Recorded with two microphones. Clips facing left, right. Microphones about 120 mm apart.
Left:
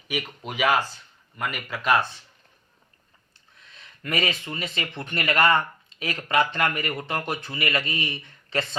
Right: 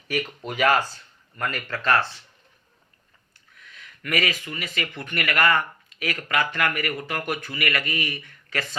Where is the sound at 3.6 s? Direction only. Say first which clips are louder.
Right 1 dB; 25° left (ahead or behind).